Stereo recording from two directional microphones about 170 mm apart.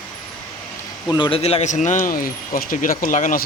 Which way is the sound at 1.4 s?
40° left (ahead or behind).